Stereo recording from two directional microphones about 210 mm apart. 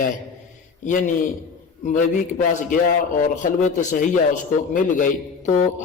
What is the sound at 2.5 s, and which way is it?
A man's voice, 40° left (ahead or behind).